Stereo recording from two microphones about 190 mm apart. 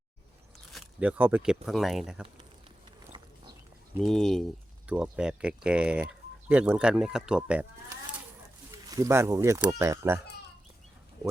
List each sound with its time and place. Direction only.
0.7 s speech: 5° right (ahead or behind)
4.0 s speech: centre (ahead or behind)
8.7 s speech: 15° right (ahead or behind)